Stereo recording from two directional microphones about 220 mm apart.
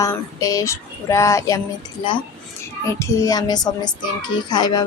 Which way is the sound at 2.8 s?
15° left (ahead or behind).